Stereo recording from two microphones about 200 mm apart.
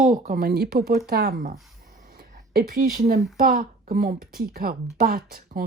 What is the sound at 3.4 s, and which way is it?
A woman's voice, 45° right (ahead or behind).